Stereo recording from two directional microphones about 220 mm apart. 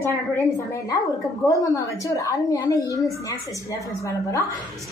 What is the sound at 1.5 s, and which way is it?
A woman's voice, 15° left (ahead or behind).